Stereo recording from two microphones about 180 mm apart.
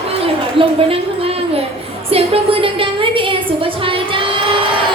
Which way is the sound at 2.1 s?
30° right (ahead or behind).